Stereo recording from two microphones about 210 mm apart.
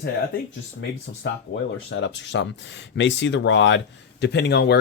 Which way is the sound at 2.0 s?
60° left (ahead or behind).